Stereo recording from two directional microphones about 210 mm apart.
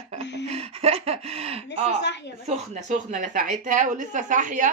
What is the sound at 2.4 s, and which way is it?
A woman's voice, 35° right (ahead or behind).